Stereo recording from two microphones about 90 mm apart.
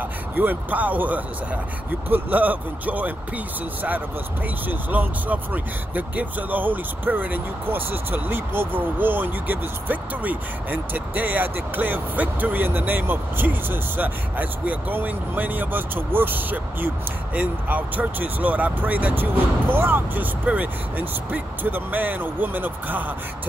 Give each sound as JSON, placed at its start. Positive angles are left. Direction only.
{"t": 0.4, "sound": "speech", "side_deg": -20}
{"t": 4.6, "sound": "speech", "side_deg": -20}